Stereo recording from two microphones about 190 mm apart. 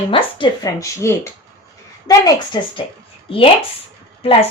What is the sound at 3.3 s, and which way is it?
Speech, 30° left (ahead or behind).